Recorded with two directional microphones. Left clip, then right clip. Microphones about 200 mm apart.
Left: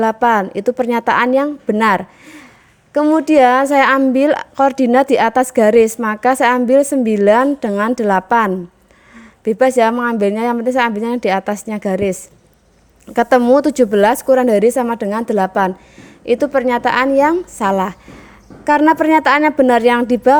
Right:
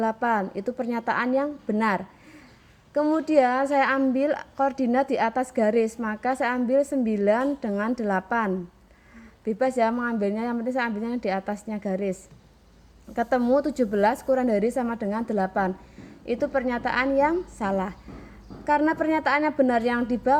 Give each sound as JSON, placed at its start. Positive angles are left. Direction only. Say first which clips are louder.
{"t": 0.0, "sound": "a woman's voice", "louder": "left 11 dB", "side_deg": 45}